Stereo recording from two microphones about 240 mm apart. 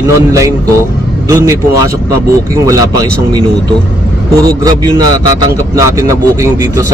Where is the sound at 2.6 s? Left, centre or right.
Centre.